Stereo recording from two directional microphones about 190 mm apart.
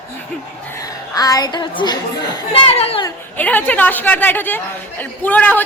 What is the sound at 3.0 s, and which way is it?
A woman's voice, 10° left (ahead or behind).